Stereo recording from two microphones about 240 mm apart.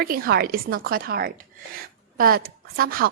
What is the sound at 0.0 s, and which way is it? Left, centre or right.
A woman's voice, right.